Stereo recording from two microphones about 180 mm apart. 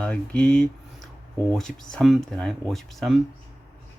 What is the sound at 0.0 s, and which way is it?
Speech, 5° left (ahead or behind).